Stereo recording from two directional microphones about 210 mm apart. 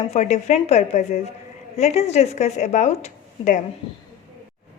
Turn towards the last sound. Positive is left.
turn(degrees=35)  # may be behind; listen again after turning